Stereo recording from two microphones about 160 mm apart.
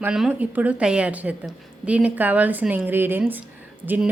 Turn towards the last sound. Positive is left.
turn(degrees=-10)  # may be behind; listen again after turning